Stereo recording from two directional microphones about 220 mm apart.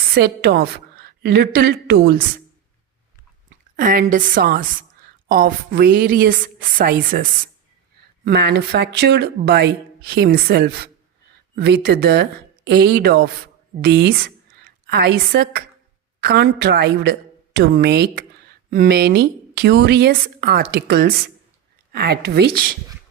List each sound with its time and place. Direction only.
0.1 s speech: 45° right (ahead or behind)
3.8 s a woman's voice: 40° right (ahead or behind)